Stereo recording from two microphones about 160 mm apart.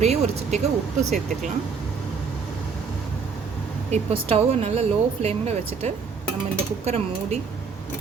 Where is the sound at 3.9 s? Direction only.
40° right (ahead or behind).